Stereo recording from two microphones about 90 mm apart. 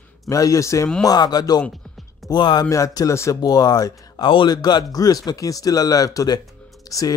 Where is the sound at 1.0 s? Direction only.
50° left (ahead or behind).